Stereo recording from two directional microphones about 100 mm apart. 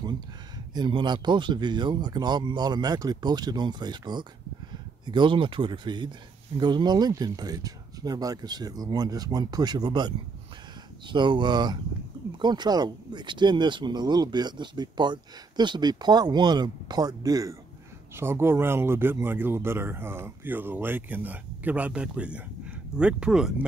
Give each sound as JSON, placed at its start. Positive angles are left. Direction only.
{"t": 0.7, "sound": "speech", "side_deg": -50}
{"t": 18.1, "sound": "speech", "side_deg": -25}